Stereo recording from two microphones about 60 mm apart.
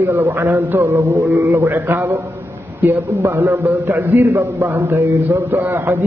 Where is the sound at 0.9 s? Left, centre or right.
Right.